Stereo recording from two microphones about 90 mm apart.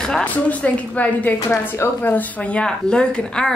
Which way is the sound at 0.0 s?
10° left (ahead or behind).